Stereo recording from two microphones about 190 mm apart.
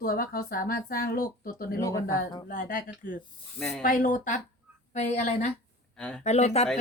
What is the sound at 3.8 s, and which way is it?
A woman's voice, 45° left (ahead or behind).